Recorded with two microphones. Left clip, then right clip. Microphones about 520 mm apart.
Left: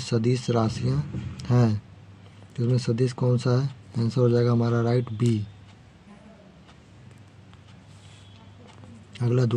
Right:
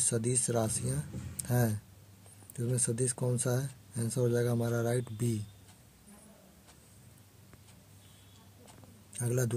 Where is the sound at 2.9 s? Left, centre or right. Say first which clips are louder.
Left 10 dB; right.